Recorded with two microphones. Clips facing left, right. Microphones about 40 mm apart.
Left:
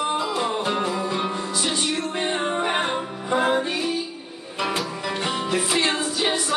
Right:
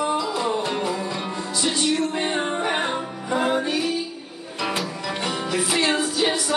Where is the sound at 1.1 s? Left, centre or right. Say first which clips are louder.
Left 2 dB; left.